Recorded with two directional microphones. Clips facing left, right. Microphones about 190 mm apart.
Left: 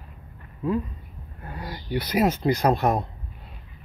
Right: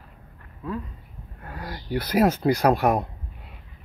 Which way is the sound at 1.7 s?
15° left (ahead or behind).